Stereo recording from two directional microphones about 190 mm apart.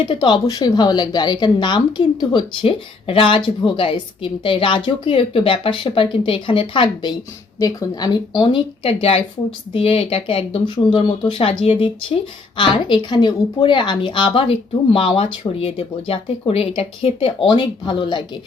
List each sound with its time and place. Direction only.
0.0 s a woman's voice: 25° left (ahead or behind)